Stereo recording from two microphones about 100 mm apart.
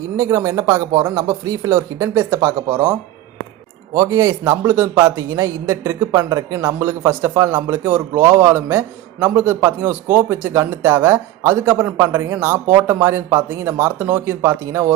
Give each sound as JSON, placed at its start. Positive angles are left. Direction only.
{"t": 0.2, "sound": "a man's voice", "side_deg": -30}
{"t": 3.9, "sound": "a man's voice", "side_deg": -35}